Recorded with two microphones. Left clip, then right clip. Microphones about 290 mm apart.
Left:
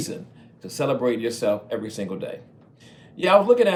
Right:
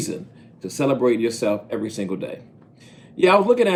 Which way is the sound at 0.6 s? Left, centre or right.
Left.